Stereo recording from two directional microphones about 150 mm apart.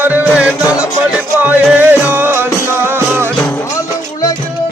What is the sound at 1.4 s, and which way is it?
Music, 10° right (ahead or behind).